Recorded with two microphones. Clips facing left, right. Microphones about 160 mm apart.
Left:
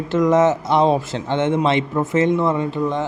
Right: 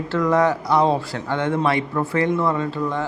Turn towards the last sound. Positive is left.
turn(degrees=20)  # may be behind; listen again after turning